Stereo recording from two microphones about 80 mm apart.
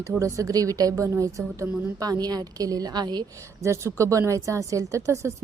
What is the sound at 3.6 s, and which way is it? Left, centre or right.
Speech, right.